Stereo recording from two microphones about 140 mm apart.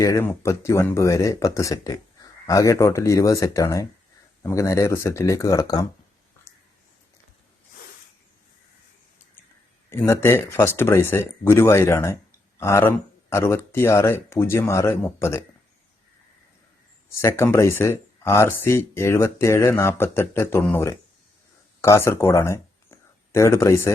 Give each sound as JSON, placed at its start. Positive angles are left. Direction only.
{"t": 0.0, "sound": "speech", "side_deg": 20}
{"t": 9.9, "sound": "speech", "side_deg": 15}
{"t": 17.2, "sound": "speech", "side_deg": 20}